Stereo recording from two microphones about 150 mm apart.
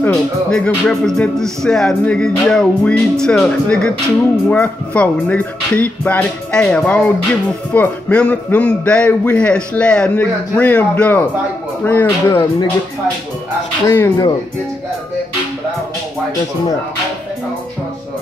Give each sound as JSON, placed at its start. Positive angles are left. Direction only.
{"t": 0.0, "sound": "a man's voice", "side_deg": 5}
{"t": 13.8, "sound": "speech", "side_deg": 20}